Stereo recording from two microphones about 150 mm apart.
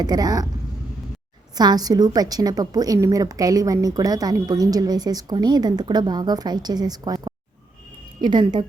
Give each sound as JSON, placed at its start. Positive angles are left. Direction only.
{"t": 0.0, "sound": "a woman's voice", "side_deg": -25}
{"t": 1.5, "sound": "a woman's voice", "side_deg": -25}